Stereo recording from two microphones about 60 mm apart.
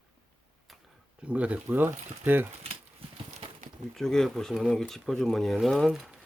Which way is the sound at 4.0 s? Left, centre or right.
Centre.